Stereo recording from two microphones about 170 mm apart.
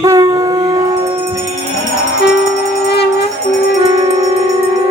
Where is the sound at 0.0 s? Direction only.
20° right (ahead or behind).